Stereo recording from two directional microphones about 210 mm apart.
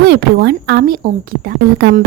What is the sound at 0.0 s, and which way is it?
Speech, 50° right (ahead or behind).